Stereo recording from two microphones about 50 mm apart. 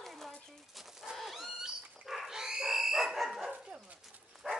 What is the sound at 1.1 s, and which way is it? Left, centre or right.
Pig, centre.